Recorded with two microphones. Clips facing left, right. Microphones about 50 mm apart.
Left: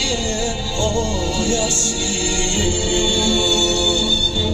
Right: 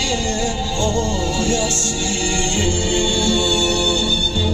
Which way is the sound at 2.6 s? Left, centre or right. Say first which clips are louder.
Left 1 dB; right.